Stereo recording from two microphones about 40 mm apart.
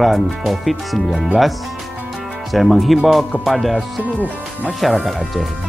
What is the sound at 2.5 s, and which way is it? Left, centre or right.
Speech, centre.